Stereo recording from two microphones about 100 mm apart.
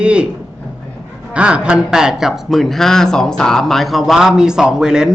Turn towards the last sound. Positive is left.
turn(degrees=-5)  # may be behind; listen again after turning